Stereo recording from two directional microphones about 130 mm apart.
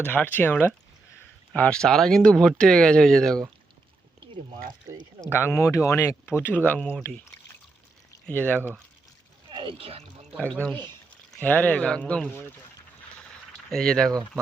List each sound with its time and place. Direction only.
0.0 s speech: 15° left (ahead or behind)
5.3 s speech: 20° left (ahead or behind)
8.3 s speech: 10° left (ahead or behind)
9.5 s speech: 40° right (ahead or behind)
10.6 s speech: 10° left (ahead or behind)
13.7 s speech: 5° left (ahead or behind)